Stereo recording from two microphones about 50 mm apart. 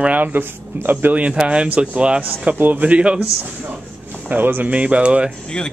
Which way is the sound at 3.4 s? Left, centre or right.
Right.